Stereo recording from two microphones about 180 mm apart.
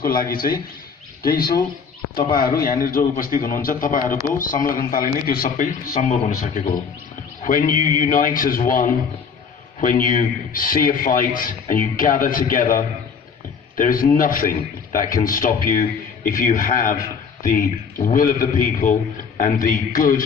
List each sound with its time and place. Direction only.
0.0 s a man's voice: 50° left (ahead or behind)